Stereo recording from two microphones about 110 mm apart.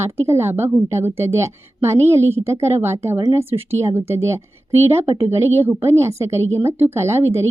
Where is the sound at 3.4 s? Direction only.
20° right (ahead or behind).